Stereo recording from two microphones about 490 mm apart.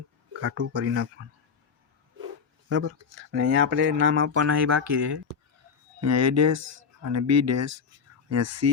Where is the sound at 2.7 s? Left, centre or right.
Right.